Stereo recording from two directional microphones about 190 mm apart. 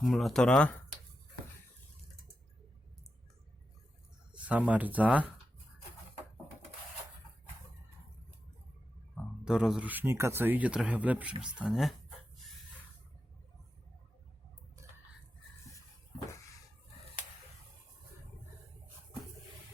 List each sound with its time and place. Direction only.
0.0 s speech: centre (ahead or behind)
4.4 s speech: 5° right (ahead or behind)
9.4 s speech: 5° right (ahead or behind)
14.8 s chicken: 15° right (ahead or behind)